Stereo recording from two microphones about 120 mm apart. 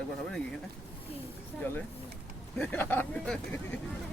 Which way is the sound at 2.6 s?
15° left (ahead or behind).